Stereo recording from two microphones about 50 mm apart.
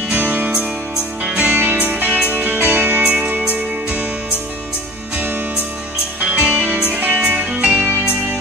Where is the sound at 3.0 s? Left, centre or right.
Right.